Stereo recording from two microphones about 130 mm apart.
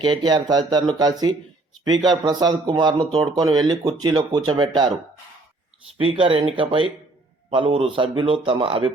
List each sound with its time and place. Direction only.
0.0 s speech: 35° right (ahead or behind)
6.0 s speech: 40° right (ahead or behind)